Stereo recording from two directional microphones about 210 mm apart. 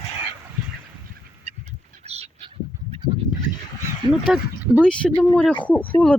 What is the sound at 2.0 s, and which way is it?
Chicken, 30° right (ahead or behind).